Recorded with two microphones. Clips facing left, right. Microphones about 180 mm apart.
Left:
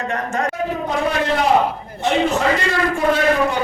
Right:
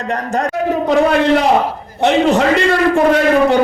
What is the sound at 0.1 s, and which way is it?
Speech, 35° right (ahead or behind).